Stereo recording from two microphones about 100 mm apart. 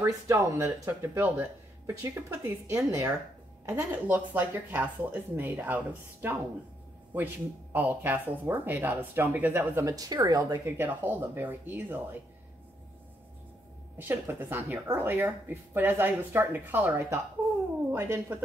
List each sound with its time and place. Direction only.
0.0 s speech: 30° right (ahead or behind)
1.9 s a woman's voice: 35° right (ahead or behind)
3.6 s speech: 15° right (ahead or behind)
7.7 s speech: 20° right (ahead or behind); by 10.6 s 40° right (ahead or behind)
10.6 s speech: 20° right (ahead or behind)
13.9 s speech: 25° right (ahead or behind)